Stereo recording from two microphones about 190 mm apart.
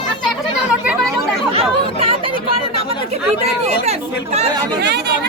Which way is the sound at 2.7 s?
35° right (ahead or behind).